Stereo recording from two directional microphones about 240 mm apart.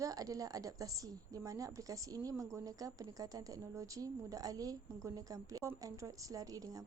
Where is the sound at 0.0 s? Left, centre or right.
Centre.